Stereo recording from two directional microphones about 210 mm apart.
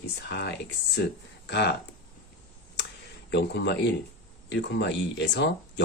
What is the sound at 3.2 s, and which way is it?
Speech, 55° left (ahead or behind).